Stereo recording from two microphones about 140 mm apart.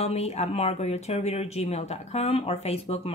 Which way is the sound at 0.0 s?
50° left (ahead or behind).